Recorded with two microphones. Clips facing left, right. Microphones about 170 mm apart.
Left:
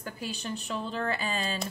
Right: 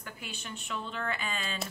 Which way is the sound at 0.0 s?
35° left (ahead or behind).